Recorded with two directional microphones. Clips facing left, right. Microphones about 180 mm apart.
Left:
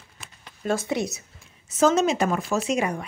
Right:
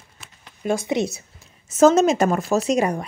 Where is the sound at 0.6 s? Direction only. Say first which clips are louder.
Right 3 dB; 15° right (ahead or behind).